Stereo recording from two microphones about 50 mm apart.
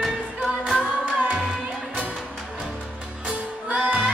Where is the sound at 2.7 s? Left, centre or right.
Centre.